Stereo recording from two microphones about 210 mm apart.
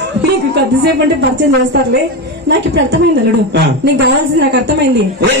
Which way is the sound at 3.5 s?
55° right (ahead or behind).